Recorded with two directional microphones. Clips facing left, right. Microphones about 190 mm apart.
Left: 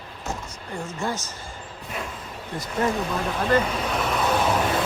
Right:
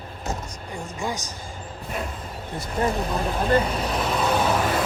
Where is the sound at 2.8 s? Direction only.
30° right (ahead or behind).